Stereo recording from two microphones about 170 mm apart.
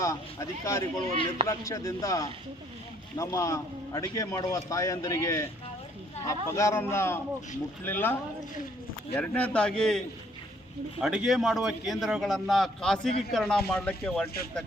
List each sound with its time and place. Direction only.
0.0 s a man's voice: 20° left (ahead or behind)
11.0 s a man's voice: centre (ahead or behind)